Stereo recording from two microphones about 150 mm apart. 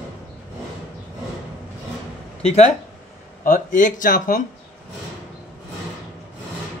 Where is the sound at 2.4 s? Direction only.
45° left (ahead or behind).